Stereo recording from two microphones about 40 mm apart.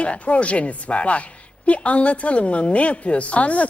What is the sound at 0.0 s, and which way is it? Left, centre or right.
A woman's voice, left.